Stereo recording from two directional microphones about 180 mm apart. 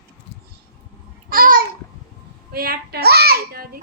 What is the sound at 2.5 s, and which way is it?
A woman's voice, 55° right (ahead or behind).